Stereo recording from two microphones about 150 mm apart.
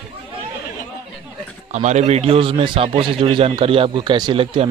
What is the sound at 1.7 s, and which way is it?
A man's voice, 50° right (ahead or behind).